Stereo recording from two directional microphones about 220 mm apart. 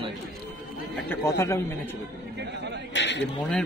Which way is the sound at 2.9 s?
55° left (ahead or behind).